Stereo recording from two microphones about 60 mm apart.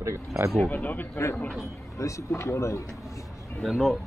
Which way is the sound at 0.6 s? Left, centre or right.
Left.